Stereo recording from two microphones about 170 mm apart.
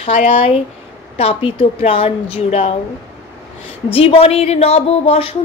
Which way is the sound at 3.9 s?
35° left (ahead or behind).